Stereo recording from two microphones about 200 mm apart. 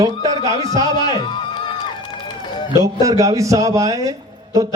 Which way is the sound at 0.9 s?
20° left (ahead or behind).